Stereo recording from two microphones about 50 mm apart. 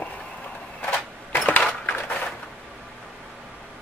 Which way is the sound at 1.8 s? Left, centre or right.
Left.